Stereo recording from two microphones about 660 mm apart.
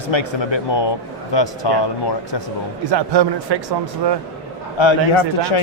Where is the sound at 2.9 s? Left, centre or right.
Right.